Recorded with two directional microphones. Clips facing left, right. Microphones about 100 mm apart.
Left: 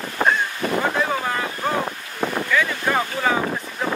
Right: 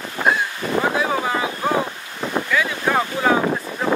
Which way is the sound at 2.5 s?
5° right (ahead or behind).